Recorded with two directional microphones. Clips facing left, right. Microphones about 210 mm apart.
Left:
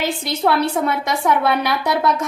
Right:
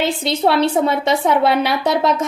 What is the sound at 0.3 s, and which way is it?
A woman's voice, 25° right (ahead or behind).